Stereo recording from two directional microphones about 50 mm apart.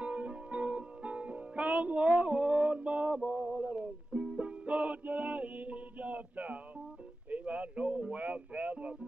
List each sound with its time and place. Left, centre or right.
0.0 s music: right